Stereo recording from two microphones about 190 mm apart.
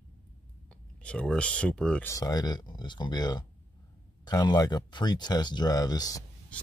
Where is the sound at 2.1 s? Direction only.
20° left (ahead or behind).